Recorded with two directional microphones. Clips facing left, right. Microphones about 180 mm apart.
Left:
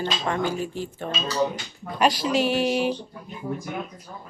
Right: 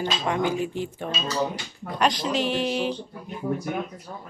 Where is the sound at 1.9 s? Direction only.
10° left (ahead or behind).